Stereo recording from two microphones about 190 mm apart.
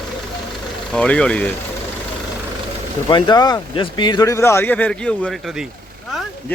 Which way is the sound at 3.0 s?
20° left (ahead or behind).